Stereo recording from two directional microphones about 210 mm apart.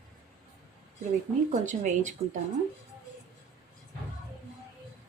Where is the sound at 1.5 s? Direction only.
35° right (ahead or behind).